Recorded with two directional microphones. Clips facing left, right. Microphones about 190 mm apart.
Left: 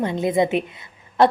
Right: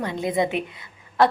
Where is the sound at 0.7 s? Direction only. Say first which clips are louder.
Left 2 dB; 25° left (ahead or behind).